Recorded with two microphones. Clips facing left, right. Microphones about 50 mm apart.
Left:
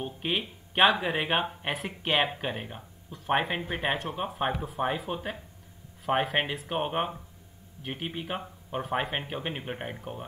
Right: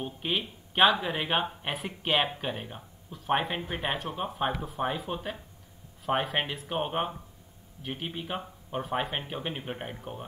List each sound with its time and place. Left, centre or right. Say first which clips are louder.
0.0 s speech: left 1 dB; centre